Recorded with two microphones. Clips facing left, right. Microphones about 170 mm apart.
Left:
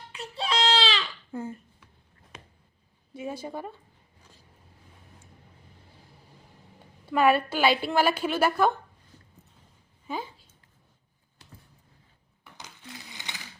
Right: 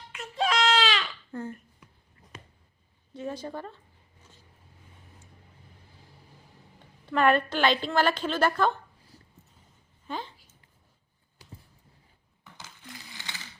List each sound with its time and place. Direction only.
0.1 s baby cry: 35° left (ahead or behind)
1.3 s speech: 5° left (ahead or behind)
3.1 s a woman's voice: 10° left (ahead or behind)
7.0 s a woman's voice: 10° left (ahead or behind)
10.1 s speech: 10° left (ahead or behind)
12.5 s a sound: 20° left (ahead or behind)